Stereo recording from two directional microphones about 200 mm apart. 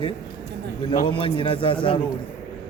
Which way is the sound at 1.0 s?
25° left (ahead or behind).